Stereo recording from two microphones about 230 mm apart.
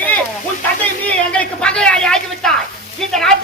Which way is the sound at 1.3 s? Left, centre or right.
Centre.